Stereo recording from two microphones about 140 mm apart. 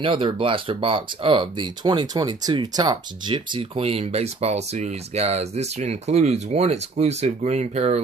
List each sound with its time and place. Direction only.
0.0 s speech: 40° right (ahead or behind)